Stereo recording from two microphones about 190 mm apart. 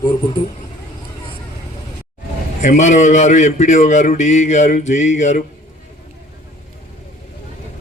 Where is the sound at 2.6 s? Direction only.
40° left (ahead or behind).